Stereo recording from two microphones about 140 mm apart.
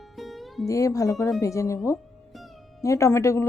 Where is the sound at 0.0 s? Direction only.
Centre (ahead or behind).